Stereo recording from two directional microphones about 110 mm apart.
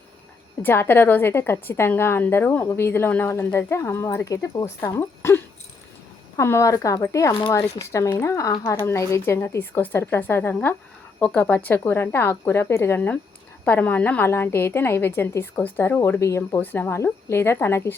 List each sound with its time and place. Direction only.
0.6 s a woman's voice: 20° left (ahead or behind)